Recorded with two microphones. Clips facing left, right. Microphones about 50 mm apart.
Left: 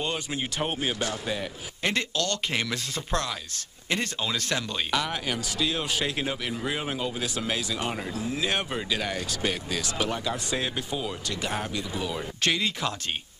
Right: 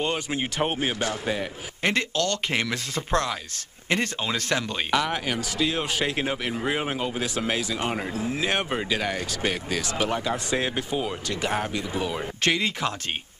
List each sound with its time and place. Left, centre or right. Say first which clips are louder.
0.0 s speech: right 3 dB; right